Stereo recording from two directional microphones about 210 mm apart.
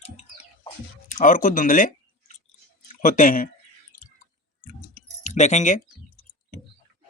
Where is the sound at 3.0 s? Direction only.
40° left (ahead or behind).